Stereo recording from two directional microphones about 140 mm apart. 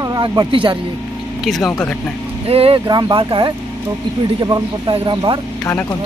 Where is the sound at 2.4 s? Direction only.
45° right (ahead or behind).